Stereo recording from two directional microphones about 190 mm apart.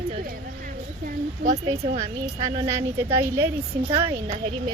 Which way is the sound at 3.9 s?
25° right (ahead or behind).